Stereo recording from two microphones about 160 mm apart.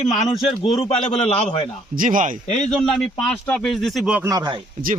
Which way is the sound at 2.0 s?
55° right (ahead or behind).